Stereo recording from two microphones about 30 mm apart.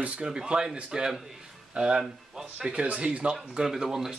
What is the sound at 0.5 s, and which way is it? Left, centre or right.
Speech, right.